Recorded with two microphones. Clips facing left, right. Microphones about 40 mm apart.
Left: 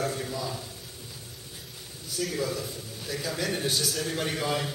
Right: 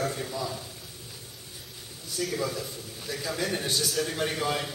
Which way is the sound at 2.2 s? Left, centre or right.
Centre.